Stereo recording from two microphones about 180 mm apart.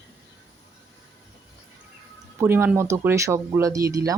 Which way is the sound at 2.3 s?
15° right (ahead or behind).